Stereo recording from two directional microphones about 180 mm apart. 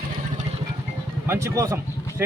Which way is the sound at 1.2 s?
15° right (ahead or behind).